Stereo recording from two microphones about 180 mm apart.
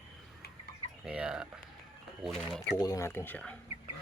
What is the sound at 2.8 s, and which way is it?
Speech, 15° left (ahead or behind).